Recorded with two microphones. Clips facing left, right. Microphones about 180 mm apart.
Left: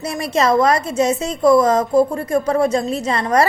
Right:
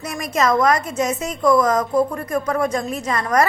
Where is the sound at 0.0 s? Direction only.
30° left (ahead or behind).